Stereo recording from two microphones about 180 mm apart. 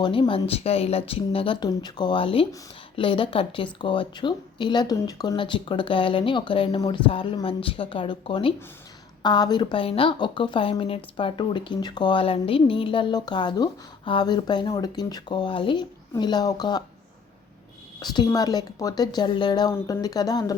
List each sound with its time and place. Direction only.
0.0 s speech: 30° left (ahead or behind)
18.0 s speech: 25° left (ahead or behind)